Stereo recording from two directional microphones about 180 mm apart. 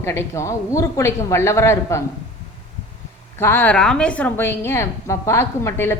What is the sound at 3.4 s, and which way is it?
A woman's voice, 10° left (ahead or behind).